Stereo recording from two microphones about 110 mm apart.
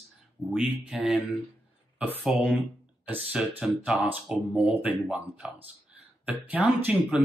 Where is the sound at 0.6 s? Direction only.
5° right (ahead or behind).